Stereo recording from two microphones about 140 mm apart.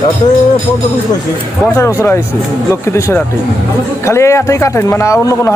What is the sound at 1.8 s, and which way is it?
A man's voice, 20° left (ahead or behind).